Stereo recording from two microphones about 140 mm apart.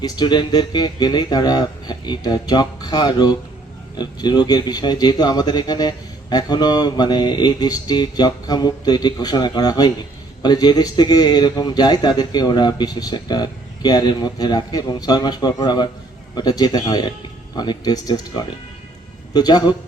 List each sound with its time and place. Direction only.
0.0 s a man's voice: 30° left (ahead or behind)